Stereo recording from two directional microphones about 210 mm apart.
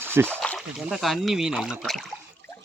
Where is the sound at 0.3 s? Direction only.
5° left (ahead or behind).